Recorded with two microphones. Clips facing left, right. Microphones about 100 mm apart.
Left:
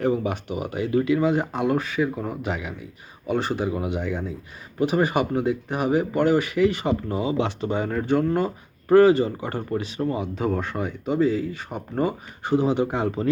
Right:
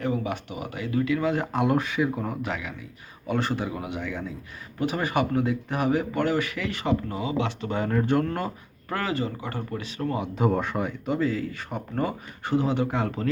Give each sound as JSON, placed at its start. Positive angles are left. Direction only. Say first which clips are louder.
{"t": 0.0, "sound": "speech", "louder": "left 5 dB", "side_deg": 30}
{"t": 1.5, "sound": "speech", "louder": "left 1 dB", "side_deg": -5}
{"t": 2.4, "sound": "speech", "louder": "left 2 dB", "side_deg": 20}
{"t": 3.9, "sound": "speech", "louder": "left 4 dB", "side_deg": 30}
{"t": 7.7, "sound": "speech", "louder": "right 1 dB", "side_deg": 5}
{"t": 8.9, "sound": "speech", "louder": "left 13 dB", "side_deg": 25}
{"t": 9.8, "sound": "speech", "louder": "left 3 dB", "side_deg": 20}
{"t": 10.2, "sound": "speech", "louder": "right 1 dB", "side_deg": -5}
{"t": 11.2, "sound": "speech", "louder": "left 5 dB", "side_deg": 15}